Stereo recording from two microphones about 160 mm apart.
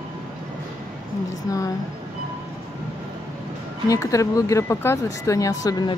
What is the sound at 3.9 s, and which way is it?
Speech, 20° left (ahead or behind).